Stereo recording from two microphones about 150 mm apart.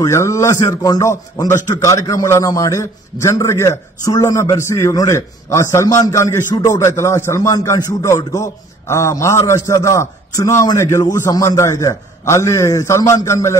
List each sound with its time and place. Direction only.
0.0 s a man's voice: 20° left (ahead or behind)